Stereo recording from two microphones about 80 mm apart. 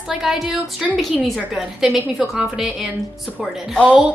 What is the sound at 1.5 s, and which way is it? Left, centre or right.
A woman's voice, centre.